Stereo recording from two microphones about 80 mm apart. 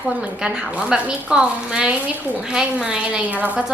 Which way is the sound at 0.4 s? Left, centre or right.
Centre.